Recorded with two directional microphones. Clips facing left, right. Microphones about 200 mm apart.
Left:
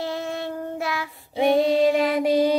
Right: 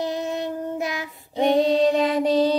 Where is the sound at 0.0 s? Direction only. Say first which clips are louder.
Right 2 dB; 20° right (ahead or behind).